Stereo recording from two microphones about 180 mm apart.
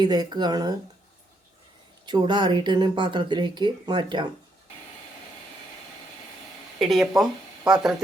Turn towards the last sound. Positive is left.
turn(degrees=-5)  # may be behind; listen again after turning